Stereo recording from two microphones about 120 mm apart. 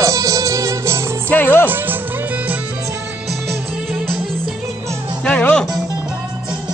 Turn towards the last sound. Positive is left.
turn(degrees=10)  # may be behind; listen again after turning